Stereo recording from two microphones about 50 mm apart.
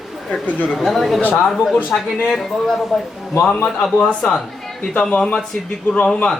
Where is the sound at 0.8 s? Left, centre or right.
Centre.